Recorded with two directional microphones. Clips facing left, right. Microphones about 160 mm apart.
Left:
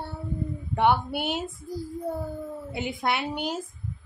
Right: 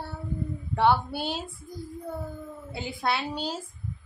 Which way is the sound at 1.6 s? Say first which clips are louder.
Left 6 dB; 30° left (ahead or behind).